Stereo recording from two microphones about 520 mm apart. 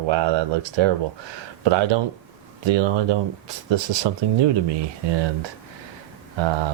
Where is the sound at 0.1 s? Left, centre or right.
Right.